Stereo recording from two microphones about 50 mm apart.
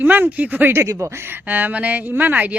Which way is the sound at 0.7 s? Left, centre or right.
Right.